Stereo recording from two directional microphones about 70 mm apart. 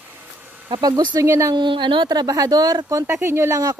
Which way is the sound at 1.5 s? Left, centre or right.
Right.